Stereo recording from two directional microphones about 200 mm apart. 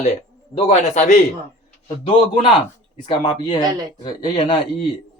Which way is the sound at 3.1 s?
25° left (ahead or behind).